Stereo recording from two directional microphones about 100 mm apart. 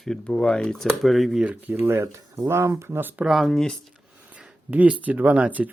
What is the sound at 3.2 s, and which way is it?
Speech, centre (ahead or behind).